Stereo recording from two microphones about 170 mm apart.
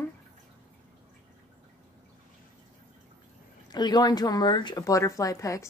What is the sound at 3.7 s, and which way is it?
Speech, 25° left (ahead or behind).